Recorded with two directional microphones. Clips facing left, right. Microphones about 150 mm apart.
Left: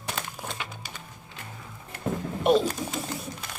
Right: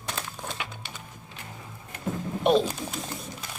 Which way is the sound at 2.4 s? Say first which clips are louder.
Even; centre (ahead or behind).